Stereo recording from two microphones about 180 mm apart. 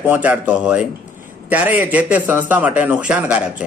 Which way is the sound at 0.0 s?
10° right (ahead or behind).